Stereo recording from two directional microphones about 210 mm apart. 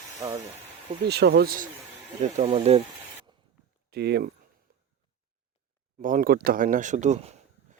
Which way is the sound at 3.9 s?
50° right (ahead or behind).